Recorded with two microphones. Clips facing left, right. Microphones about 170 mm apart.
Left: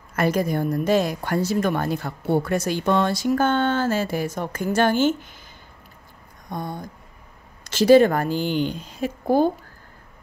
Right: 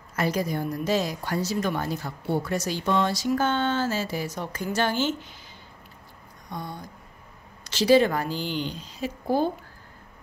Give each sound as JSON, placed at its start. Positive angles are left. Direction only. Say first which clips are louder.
{"t": 0.1, "sound": "a woman's voice", "louder": "left 5 dB", "side_deg": 55}
{"t": 6.5, "sound": "a woman's voice", "louder": "left 5 dB", "side_deg": 50}